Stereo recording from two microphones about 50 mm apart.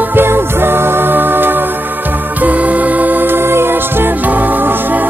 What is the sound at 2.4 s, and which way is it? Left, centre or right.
Music, right.